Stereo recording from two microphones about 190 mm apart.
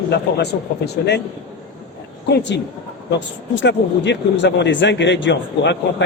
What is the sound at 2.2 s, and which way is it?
A man's voice, 65° left (ahead or behind).